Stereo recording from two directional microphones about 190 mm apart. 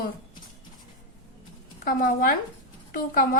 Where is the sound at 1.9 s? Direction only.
50° left (ahead or behind).